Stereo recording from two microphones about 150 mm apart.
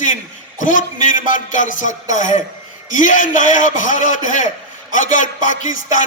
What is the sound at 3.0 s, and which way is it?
Music, 60° left (ahead or behind).